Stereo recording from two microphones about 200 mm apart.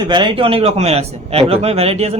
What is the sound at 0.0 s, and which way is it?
A man's voice, 25° right (ahead or behind).